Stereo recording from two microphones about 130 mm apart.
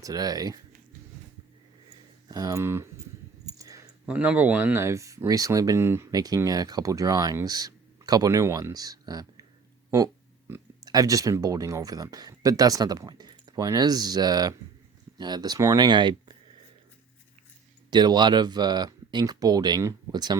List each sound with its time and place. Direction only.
0.0 s speech: 30° right (ahead or behind)
2.3 s speech: 25° right (ahead or behind)
3.6 s a sound: 25° right (ahead or behind)
4.0 s speech: 10° right (ahead or behind); by 16.4 s 35° right (ahead or behind)
17.9 s speech: 35° right (ahead or behind)